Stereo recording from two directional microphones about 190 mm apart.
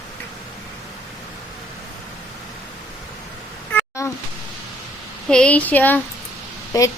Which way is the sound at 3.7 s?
15° left (ahead or behind).